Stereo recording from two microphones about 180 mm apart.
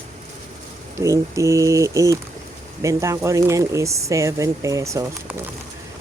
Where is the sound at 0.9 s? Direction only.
15° right (ahead or behind).